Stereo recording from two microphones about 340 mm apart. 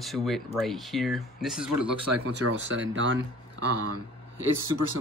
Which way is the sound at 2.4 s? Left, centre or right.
Right.